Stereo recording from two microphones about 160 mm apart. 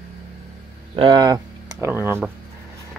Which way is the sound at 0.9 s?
30° right (ahead or behind).